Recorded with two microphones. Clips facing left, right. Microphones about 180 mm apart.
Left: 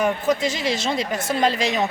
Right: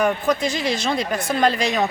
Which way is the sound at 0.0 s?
20° left (ahead or behind).